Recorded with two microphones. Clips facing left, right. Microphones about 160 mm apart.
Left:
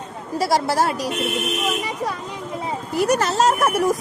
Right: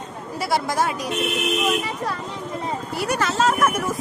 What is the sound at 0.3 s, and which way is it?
Speech, 35° left (ahead or behind).